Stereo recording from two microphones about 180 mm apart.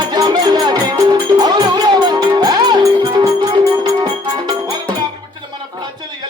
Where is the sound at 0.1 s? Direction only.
25° right (ahead or behind).